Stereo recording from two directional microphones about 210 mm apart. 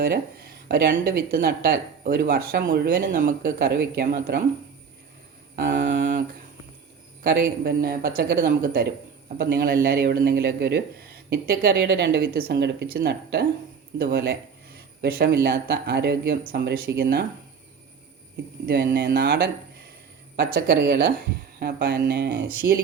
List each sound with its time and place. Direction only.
0.0 s speech: 45° right (ahead or behind)
5.5 s a sound: 40° right (ahead or behind)
7.6 s speech: 45° right (ahead or behind)
14.8 s a sound: 50° right (ahead or behind)
15.4 s speech: 50° right (ahead or behind)
18.6 s speech: 50° right (ahead or behind)